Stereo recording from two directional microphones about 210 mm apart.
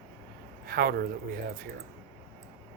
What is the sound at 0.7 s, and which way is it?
Speech, 45° right (ahead or behind).